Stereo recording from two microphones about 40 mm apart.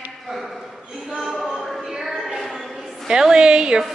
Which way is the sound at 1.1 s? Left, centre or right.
Centre.